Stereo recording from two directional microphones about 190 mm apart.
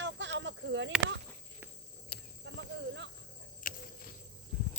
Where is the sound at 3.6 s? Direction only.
45° left (ahead or behind).